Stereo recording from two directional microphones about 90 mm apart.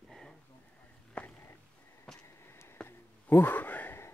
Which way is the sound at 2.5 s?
30° left (ahead or behind).